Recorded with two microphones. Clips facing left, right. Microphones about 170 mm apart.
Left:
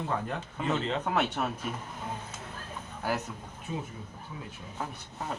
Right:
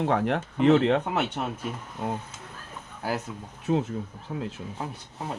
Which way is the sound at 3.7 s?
65° right (ahead or behind).